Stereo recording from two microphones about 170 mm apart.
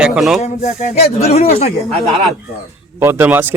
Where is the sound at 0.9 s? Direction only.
40° left (ahead or behind).